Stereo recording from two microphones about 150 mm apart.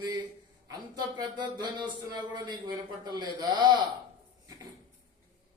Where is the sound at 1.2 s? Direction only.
30° right (ahead or behind).